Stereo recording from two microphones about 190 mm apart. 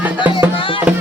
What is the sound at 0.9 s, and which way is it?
Music, 10° right (ahead or behind).